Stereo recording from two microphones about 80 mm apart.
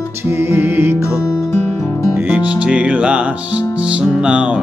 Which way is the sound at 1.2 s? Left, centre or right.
Left.